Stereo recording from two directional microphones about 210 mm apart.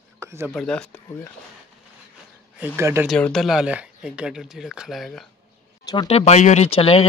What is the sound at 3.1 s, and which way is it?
Speech, centre (ahead or behind).